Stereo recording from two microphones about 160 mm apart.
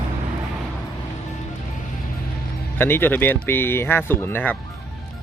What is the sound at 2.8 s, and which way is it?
Speech, 15° left (ahead or behind).